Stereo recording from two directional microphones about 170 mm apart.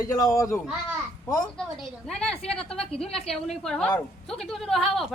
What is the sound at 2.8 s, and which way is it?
Speech, 35° left (ahead or behind).